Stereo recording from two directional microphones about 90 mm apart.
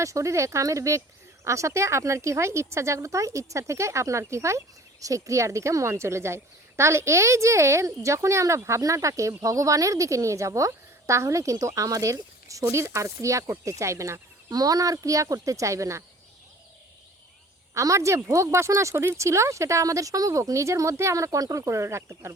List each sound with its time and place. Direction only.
0.0 s speech: 35° right (ahead or behind)
17.7 s speech: 35° right (ahead or behind)